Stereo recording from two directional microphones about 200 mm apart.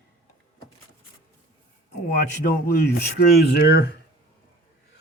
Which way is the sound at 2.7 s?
55° left (ahead or behind).